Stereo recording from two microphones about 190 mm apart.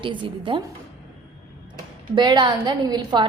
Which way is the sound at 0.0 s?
25° right (ahead or behind).